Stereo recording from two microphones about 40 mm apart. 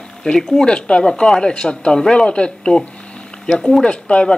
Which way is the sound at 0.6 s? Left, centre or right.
Left.